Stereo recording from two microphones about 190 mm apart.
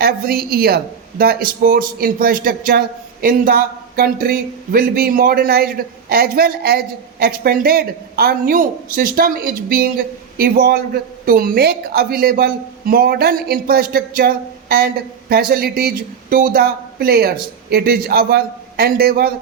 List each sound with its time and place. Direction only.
0.0 s speech: 55° right (ahead or behind)